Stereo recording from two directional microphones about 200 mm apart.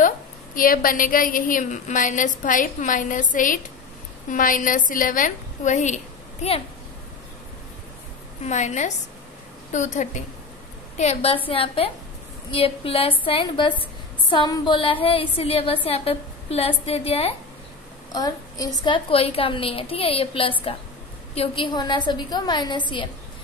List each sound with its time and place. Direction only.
0.6 s a woman's voice: 45° left (ahead or behind)
8.5 s a woman's voice: 35° left (ahead or behind)
18.1 s a woman's voice: 20° left (ahead or behind)